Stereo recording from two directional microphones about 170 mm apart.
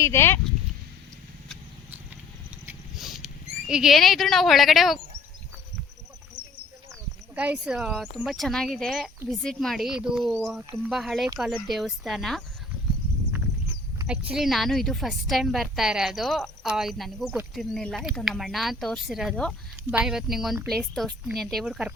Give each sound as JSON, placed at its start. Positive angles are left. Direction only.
{"t": 0.0, "sound": "speech", "side_deg": 15}
{"t": 3.0, "sound": "rodents", "side_deg": 0}
{"t": 3.7, "sound": "a woman's voice", "side_deg": -5}
{"t": 7.3, "sound": "a woman's voice", "side_deg": -5}
{"t": 14.1, "sound": "a woman's voice", "side_deg": -5}